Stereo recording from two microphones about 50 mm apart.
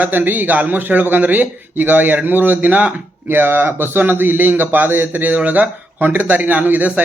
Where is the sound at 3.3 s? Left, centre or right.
Right.